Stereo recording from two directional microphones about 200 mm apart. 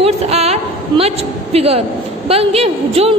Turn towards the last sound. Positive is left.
turn(degrees=-30)  # may be behind; listen again after turning